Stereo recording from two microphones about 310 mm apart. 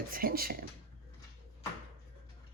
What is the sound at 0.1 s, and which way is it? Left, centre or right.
Speech, right.